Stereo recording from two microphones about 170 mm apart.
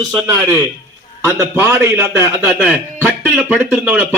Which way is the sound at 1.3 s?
15° right (ahead or behind).